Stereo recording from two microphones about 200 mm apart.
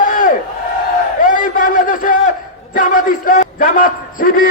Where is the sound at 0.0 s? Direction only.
45° left (ahead or behind).